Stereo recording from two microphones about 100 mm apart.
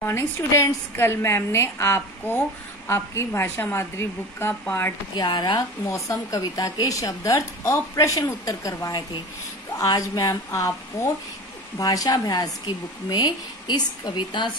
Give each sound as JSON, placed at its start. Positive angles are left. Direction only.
{"t": 0.0, "sound": "a woman's voice", "side_deg": 30}
{"t": 5.1, "sound": "a woman's voice", "side_deg": 45}
{"t": 5.9, "sound": "a woman's voice", "side_deg": 30}